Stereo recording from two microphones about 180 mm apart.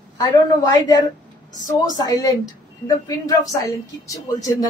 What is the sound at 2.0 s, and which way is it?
Speech, 20° left (ahead or behind).